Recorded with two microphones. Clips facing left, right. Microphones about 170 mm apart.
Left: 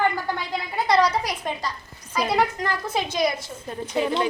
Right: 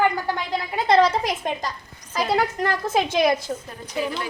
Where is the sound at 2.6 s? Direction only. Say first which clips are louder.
Right 4 dB; 50° right (ahead or behind).